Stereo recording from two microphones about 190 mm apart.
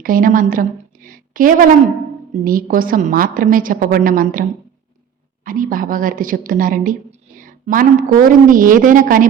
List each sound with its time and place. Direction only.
0.0 s a woman's voice: 45° right (ahead or behind)
5.5 s a woman's voice: 45° right (ahead or behind)